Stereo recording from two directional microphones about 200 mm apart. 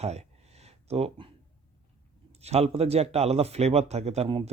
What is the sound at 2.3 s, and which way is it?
Speech, 30° right (ahead or behind).